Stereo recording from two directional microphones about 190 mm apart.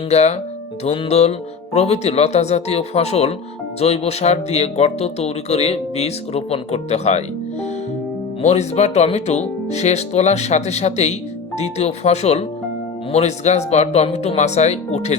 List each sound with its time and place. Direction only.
0.1 s speech: 35° left (ahead or behind)
8.4 s speech: 35° left (ahead or behind)